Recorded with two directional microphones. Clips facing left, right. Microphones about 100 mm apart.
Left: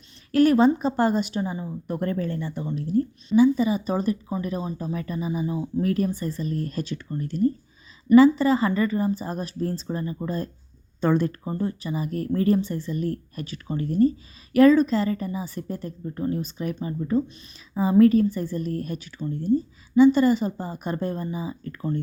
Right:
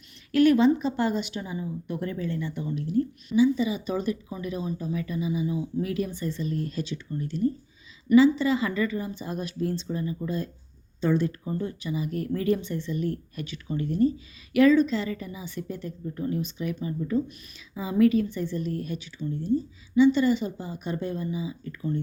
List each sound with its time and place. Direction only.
0.3 s a woman's voice: 40° left (ahead or behind)
2.0 s a woman's voice: 50° left (ahead or behind)
11.4 s a woman's voice: 35° left (ahead or behind)